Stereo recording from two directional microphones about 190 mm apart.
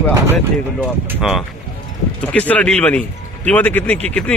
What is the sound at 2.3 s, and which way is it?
Speech, 5° left (ahead or behind).